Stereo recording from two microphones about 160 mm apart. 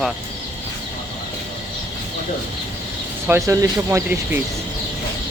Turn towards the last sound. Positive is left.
turn(degrees=-15)  # may be behind; listen again after turning